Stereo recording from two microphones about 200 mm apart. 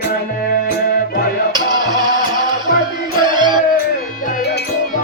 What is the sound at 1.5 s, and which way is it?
Music, 20° right (ahead or behind).